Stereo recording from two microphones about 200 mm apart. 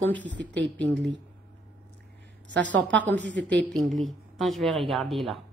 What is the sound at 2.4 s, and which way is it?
Speech, 65° right (ahead or behind).